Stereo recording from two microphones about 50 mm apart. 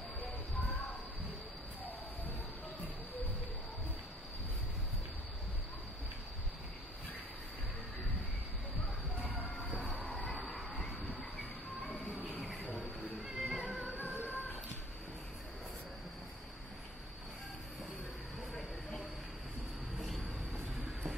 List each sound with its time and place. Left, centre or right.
10.0 s train: centre
13.3 s music: centre
13.9 s music: right